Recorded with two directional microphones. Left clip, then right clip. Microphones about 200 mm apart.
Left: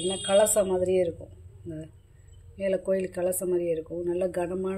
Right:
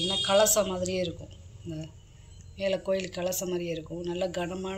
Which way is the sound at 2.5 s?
40° left (ahead or behind).